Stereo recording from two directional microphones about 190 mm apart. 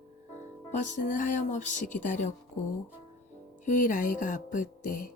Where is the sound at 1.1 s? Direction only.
40° left (ahead or behind).